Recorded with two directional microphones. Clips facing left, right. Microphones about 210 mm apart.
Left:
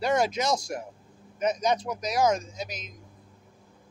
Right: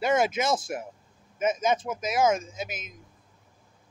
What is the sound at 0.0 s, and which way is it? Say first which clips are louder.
Speech: right 1 dB; 5° right (ahead or behind).